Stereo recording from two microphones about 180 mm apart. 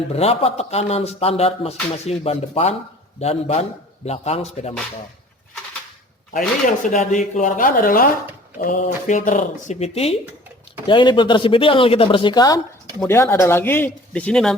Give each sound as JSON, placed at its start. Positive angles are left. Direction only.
{"t": 0.1, "sound": "speech", "side_deg": 35}
{"t": 6.7, "sound": "speech", "side_deg": 45}